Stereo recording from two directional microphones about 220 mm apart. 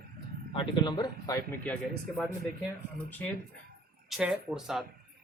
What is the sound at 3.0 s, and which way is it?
Speech, 10° left (ahead or behind).